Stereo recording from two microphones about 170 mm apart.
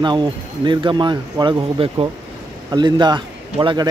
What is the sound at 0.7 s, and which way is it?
Speech, 25° right (ahead or behind).